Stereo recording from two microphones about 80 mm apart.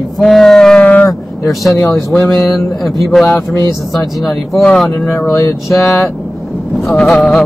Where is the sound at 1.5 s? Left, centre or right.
Centre.